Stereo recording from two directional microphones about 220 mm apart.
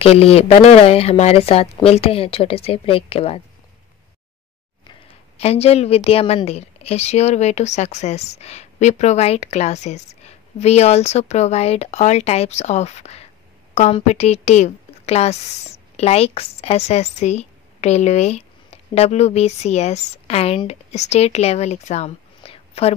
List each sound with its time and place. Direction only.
0.0 s a woman's voice: 25° left (ahead or behind)
5.4 s a woman's voice: 30° left (ahead or behind)